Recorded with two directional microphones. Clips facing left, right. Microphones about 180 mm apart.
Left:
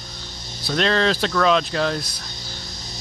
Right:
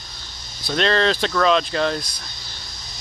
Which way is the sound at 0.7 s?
Centre (ahead or behind).